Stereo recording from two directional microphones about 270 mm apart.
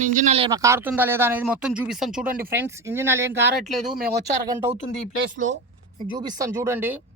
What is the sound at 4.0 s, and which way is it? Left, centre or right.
Speech, right.